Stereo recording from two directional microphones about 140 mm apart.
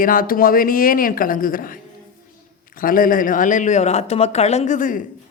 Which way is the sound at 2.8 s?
80° left.